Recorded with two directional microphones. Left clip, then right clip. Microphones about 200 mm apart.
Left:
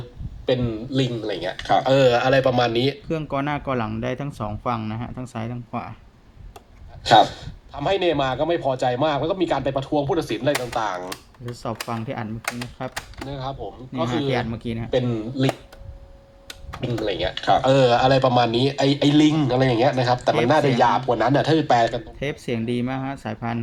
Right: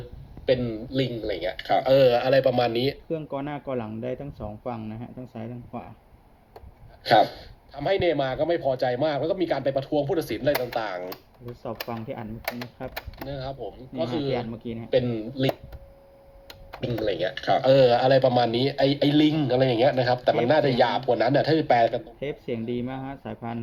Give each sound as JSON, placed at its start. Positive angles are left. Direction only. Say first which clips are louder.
{"t": 0.9, "sound": "speech", "louder": "left 2 dB", "side_deg": 5}
{"t": 3.1, "sound": "a man's voice", "louder": "left 6 dB", "side_deg": 15}
{"t": 7.0, "sound": "speech", "louder": "left 4 dB", "side_deg": 0}
{"t": 11.6, "sound": "a man's voice", "louder": "left 4 dB", "side_deg": 10}
{"t": 13.3, "sound": "speech", "louder": "left 4 dB", "side_deg": -5}
{"t": 13.9, "sound": "a man's voice", "louder": "left 4 dB", "side_deg": 15}
{"t": 14.8, "sound": "speech", "louder": "even", "side_deg": 0}
{"t": 17.0, "sound": "a man's voice", "louder": "left 2 dB", "side_deg": -10}